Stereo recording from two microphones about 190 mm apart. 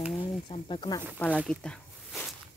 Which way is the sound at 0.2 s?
25° left (ahead or behind).